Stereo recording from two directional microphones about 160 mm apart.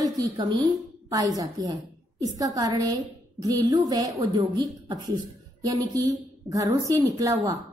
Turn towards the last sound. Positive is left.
turn(degrees=-20)  # may be behind; listen again after turning